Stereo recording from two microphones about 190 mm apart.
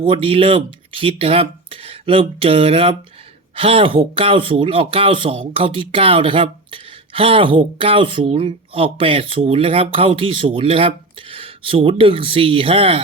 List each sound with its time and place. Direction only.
0.1 s speech: 30° right (ahead or behind)